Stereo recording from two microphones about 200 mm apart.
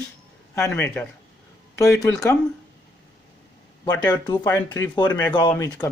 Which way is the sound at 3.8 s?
20° left (ahead or behind).